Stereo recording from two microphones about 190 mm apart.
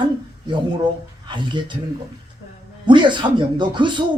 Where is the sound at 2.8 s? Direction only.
25° right (ahead or behind).